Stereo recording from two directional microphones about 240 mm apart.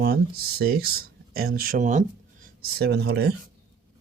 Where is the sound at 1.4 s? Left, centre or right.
Right.